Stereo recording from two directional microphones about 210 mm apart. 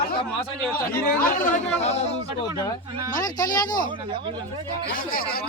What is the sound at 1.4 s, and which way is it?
Speech, 35° left (ahead or behind).